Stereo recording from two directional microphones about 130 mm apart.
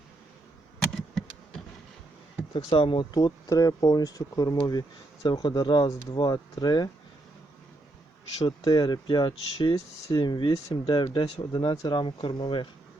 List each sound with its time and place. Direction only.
0.9 s insect: centre (ahead or behind)
2.6 s speech: 40° left (ahead or behind)
8.4 s speech: 30° left (ahead or behind)